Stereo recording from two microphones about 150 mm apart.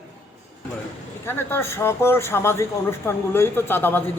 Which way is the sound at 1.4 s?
15° left (ahead or behind).